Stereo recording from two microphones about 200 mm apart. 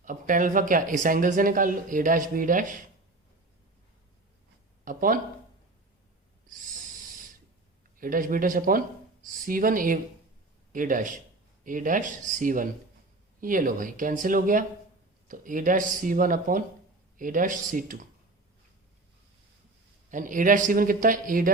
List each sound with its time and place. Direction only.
0.0 s speech: 40° right (ahead or behind)
4.9 s speech: 45° right (ahead or behind)
7.9 s a man's voice: 45° right (ahead or behind)
20.1 s a man's voice: 40° right (ahead or behind)